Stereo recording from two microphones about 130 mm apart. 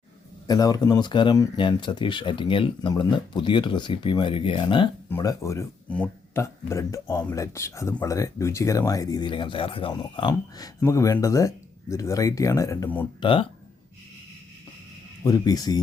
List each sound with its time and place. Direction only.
0.4 s speech: 30° left (ahead or behind)
5.0 s speech: 25° left (ahead or behind)
5.9 s speech: 10° left (ahead or behind)
6.4 s speech: 20° left (ahead or behind)
10.8 s speech: 20° left (ahead or behind)
13.1 s speech: 40° left (ahead or behind)
15.2 s speech: 25° left (ahead or behind)